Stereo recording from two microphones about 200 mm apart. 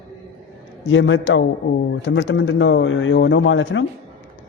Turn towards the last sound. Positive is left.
turn(degrees=70)  # may be behind; listen again after turning